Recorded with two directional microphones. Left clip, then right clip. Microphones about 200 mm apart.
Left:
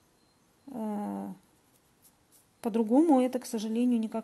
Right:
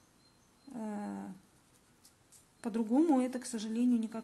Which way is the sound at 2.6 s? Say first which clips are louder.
Left 6 dB; 30° left (ahead or behind).